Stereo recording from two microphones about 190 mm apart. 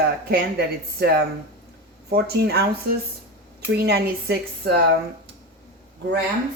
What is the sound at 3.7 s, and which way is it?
Speech, 60° right (ahead or behind).